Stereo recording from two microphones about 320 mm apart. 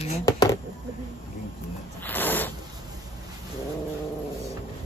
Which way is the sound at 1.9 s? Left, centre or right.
Centre.